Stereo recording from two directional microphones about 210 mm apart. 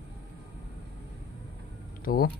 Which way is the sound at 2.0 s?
45° left (ahead or behind).